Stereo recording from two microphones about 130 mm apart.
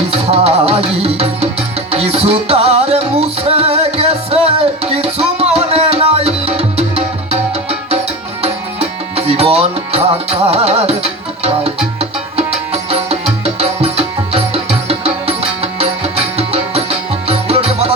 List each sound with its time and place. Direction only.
0.1 s music: 50° right (ahead or behind)